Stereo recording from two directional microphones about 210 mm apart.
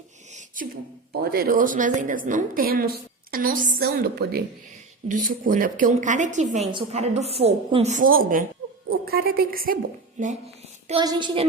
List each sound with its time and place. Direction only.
0.3 s a sound: 35° right (ahead or behind)
1.2 s a woman's voice: 45° right (ahead or behind)
11.0 s a woman's voice: 20° right (ahead or behind)